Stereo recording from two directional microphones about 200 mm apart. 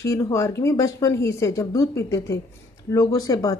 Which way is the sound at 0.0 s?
15° left (ahead or behind).